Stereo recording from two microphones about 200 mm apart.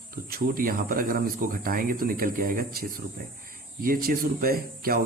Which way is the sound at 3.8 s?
45° right (ahead or behind).